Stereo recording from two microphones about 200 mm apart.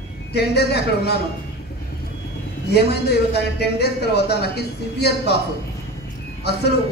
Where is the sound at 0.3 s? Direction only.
55° left (ahead or behind).